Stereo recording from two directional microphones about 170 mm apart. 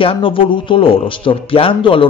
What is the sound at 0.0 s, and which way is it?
Speech, 30° left (ahead or behind).